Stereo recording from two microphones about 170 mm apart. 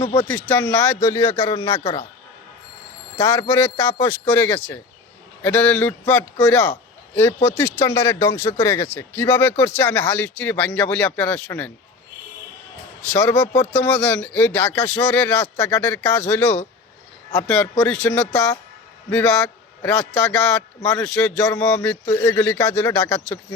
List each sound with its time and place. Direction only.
0.0 s speech: 30° left (ahead or behind)
0.3 s speech: 10° left (ahead or behind)
3.2 s speech: 10° left (ahead or behind)
13.1 s a man's voice: 10° left (ahead or behind)